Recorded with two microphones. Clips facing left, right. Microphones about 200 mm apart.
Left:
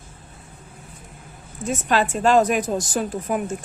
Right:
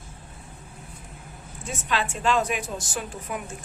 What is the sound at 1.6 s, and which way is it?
A woman's voice, 45° left (ahead or behind).